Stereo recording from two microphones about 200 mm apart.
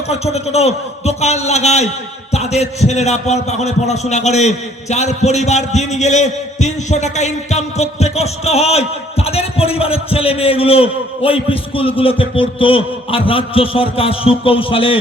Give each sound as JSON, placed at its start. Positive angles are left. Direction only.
{"t": 0.1, "sound": "a man's voice", "side_deg": 30}